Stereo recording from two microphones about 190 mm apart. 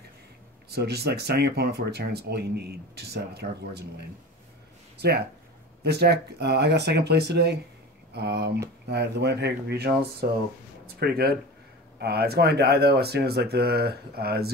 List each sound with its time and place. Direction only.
0.7 s speech: 60° right (ahead or behind)
5.9 s speech: 60° right (ahead or behind)